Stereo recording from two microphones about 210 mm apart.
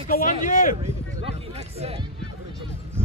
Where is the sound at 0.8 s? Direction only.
30° right (ahead or behind).